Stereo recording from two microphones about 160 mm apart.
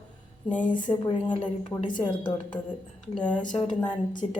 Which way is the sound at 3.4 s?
30° left (ahead or behind).